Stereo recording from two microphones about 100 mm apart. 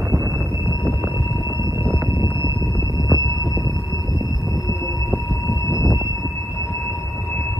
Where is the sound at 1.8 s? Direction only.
30° right (ahead or behind).